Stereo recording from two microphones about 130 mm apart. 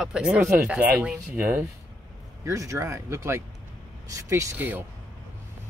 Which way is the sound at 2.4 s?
25° right (ahead or behind).